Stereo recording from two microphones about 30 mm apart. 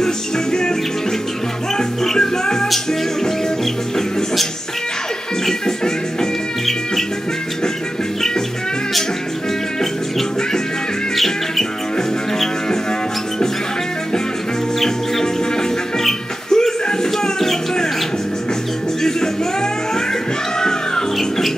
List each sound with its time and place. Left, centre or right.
0.0 s music: left
2.1 s music: left
9.8 s music: centre
16.4 s a sound: centre
19.0 s music: centre